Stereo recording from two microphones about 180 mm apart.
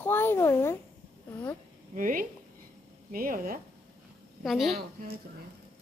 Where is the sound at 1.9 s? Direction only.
50° right (ahead or behind).